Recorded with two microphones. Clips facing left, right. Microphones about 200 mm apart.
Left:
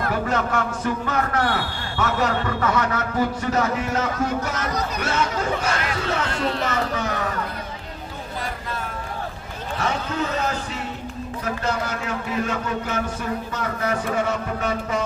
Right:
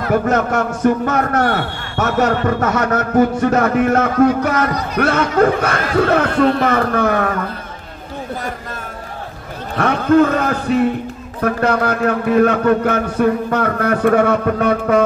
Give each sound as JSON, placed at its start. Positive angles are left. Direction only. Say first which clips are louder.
{"t": 0.1, "sound": "speech", "louder": "right 10 dB", "side_deg": -50}
{"t": 9.8, "sound": "speech", "louder": "right 13 dB", "side_deg": -60}